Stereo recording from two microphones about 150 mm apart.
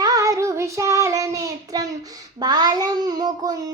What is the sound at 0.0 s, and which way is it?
Child singing, 25° right (ahead or behind).